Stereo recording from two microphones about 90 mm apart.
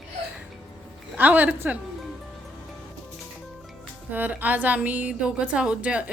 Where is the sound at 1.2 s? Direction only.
20° right (ahead or behind).